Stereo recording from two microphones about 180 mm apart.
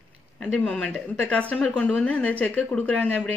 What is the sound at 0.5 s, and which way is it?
A woman's voice, 5° left (ahead or behind).